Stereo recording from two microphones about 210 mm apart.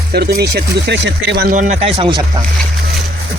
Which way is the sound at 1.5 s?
35° right (ahead or behind).